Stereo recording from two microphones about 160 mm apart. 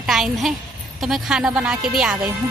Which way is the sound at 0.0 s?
Centre (ahead or behind).